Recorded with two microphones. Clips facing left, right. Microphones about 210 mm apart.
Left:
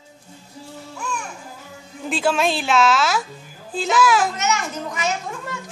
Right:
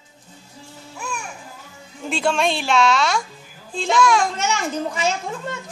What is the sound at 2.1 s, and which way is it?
Speech, centre (ahead or behind).